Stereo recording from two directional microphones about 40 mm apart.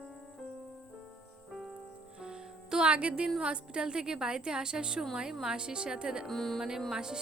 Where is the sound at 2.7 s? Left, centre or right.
Right.